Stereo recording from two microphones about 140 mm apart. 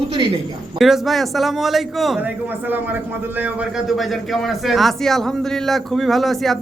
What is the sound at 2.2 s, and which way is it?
A man's voice, 10° right (ahead or behind).